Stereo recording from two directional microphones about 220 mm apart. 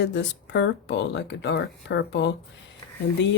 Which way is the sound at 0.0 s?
50° left (ahead or behind).